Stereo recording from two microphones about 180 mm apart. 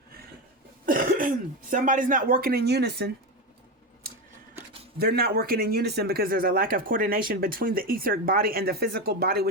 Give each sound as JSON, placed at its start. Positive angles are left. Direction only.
{"t": 0.9, "sound": "cough", "side_deg": -50}
{"t": 1.7, "sound": "speech", "side_deg": -45}
{"t": 4.0, "sound": "scissors", "side_deg": -55}
{"t": 4.9, "sound": "speech", "side_deg": -60}